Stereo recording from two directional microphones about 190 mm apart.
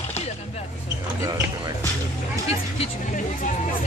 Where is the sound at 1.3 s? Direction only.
20° right (ahead or behind).